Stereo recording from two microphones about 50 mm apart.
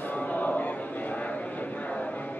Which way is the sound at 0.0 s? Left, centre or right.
Left.